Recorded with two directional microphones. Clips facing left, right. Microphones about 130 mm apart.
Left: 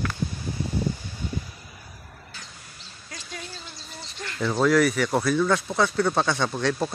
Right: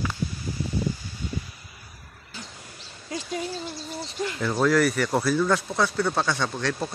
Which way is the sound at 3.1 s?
35° right (ahead or behind).